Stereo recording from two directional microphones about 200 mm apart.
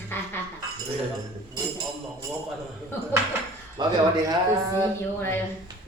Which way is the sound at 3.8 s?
20° right (ahead or behind).